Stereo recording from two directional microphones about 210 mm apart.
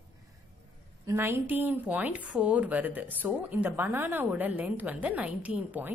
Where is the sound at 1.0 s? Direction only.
10° right (ahead or behind).